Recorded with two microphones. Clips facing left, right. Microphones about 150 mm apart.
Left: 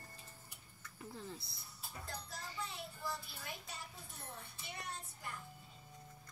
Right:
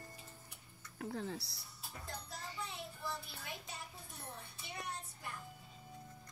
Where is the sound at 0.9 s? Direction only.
85° right.